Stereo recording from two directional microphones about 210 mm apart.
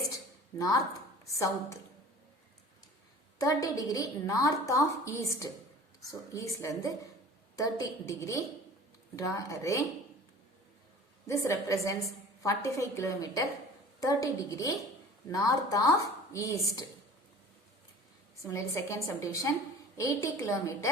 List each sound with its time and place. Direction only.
1.2 s speech: 15° left (ahead or behind)
3.4 s a woman's voice: 15° left (ahead or behind)
11.3 s a woman's voice: 15° left (ahead or behind)
18.5 s a woman's voice: 15° left (ahead or behind)